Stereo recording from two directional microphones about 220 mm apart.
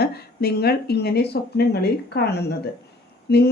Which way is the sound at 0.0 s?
45° left (ahead or behind).